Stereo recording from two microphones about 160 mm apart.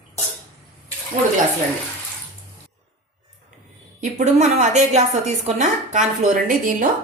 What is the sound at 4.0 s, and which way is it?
A woman's voice, 50° right (ahead or behind).